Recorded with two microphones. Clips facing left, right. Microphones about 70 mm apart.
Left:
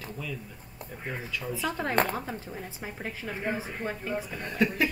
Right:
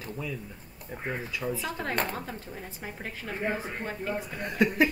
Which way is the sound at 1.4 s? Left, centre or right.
Centre.